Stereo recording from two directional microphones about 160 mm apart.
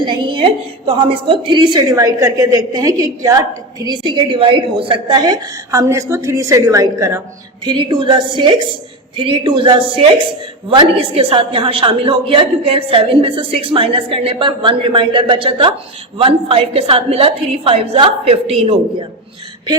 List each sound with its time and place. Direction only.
0.0 s a sound: 30° right (ahead or behind)
0.9 s a woman's voice: 35° right (ahead or behind); by 7.2 s 20° right (ahead or behind)
7.6 s a woman's voice: 30° right (ahead or behind)